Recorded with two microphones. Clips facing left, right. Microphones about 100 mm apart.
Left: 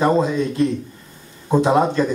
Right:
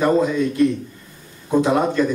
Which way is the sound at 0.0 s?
25° left (ahead or behind).